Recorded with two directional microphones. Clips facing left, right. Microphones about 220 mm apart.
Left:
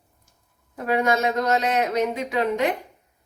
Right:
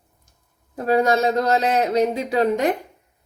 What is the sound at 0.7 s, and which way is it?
Speech, 35° right (ahead or behind).